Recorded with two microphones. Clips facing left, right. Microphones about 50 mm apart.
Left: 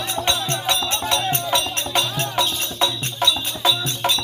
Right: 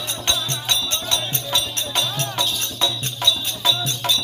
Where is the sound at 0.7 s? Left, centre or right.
Left.